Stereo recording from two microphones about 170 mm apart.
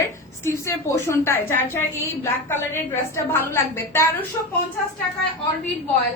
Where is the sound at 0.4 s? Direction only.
15° left (ahead or behind).